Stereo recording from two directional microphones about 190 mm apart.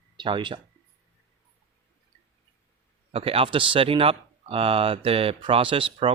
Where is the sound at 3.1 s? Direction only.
30° right (ahead or behind).